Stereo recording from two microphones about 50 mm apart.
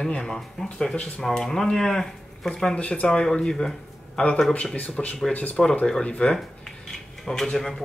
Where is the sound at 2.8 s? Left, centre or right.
Left.